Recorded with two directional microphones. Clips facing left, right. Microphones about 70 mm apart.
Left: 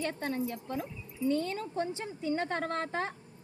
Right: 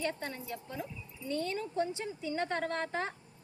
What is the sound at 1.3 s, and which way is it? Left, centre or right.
A woman's voice, left.